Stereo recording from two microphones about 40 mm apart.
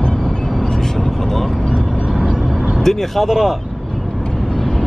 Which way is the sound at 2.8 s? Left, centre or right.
Centre.